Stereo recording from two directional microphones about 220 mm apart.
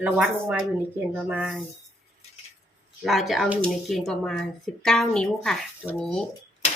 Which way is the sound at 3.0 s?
Centre (ahead or behind).